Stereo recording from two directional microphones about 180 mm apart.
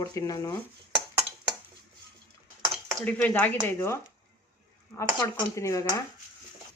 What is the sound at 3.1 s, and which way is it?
Speech, 10° left (ahead or behind).